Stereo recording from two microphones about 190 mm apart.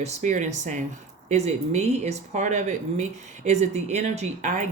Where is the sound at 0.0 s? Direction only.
40° right (ahead or behind).